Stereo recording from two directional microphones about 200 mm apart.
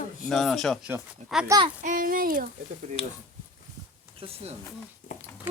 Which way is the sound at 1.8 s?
40° right (ahead or behind).